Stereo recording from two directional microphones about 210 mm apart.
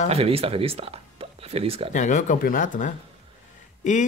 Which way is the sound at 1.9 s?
35° left (ahead or behind).